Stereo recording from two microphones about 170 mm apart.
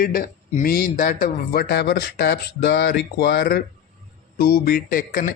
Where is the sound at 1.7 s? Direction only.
70° left (ahead or behind).